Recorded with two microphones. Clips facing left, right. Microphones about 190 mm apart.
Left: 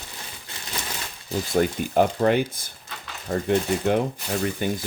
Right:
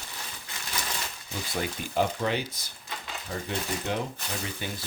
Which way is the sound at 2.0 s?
55° left (ahead or behind).